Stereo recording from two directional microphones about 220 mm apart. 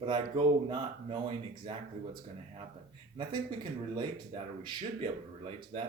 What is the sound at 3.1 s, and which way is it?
Speech, 20° right (ahead or behind).